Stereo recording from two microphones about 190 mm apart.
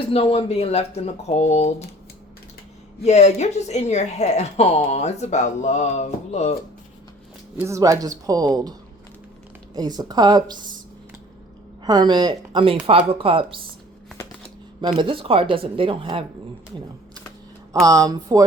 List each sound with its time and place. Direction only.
0.1 s a woman's voice: 30° left (ahead or behind)
3.0 s a woman's voice: 35° left (ahead or behind)
7.5 s speech: 15° right (ahead or behind)
9.7 s speech: 20° right (ahead or behind)
11.9 s speech: 20° right (ahead or behind)
14.8 s speech: 25° right (ahead or behind)
17.7 s speech: 15° right (ahead or behind)